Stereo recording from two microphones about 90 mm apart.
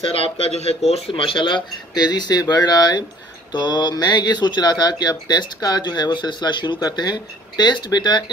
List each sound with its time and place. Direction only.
0.0 s speech: 90° left; by 8.2 s 55° left (ahead or behind)